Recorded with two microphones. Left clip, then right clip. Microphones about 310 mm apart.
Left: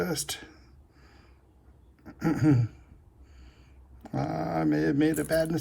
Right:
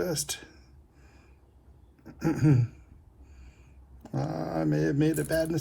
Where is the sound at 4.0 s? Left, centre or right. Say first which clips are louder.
Left 2 dB; left.